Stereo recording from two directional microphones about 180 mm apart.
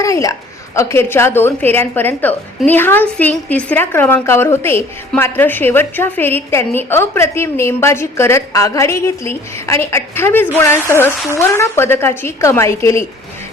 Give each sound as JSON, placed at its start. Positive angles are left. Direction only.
{"t": 0.0, "sound": "a woman's voice", "side_deg": 15}